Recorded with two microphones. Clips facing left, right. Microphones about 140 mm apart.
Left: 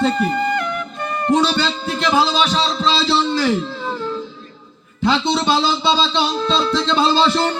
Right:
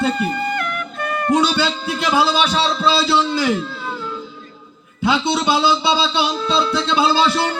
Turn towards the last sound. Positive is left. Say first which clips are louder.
# left 1 dB
turn(degrees=-5)  # may be behind; listen again after turning